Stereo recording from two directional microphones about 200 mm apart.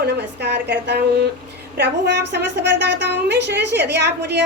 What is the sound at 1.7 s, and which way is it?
A woman's voice, 60° right (ahead or behind).